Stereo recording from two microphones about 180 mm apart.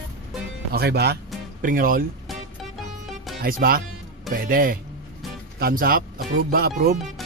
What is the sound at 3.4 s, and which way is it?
Speech, 55° right (ahead or behind).